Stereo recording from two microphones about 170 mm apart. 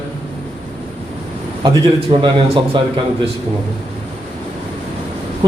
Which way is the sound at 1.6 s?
25° right (ahead or behind).